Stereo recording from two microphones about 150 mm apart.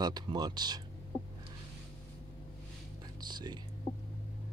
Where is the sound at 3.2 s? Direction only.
30° right (ahead or behind).